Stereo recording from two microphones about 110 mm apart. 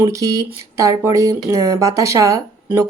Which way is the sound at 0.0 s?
30° right (ahead or behind).